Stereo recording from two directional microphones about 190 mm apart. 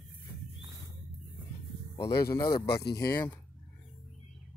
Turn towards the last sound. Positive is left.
turn(degrees=55)  # may be behind; listen again after turning